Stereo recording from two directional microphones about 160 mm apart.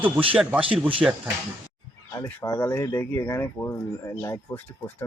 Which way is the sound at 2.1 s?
15° left (ahead or behind).